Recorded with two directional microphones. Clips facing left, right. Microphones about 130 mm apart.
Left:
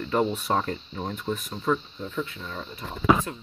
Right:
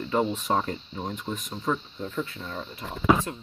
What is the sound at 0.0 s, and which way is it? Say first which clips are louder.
Cricket: left 1 dB; 25° right (ahead or behind).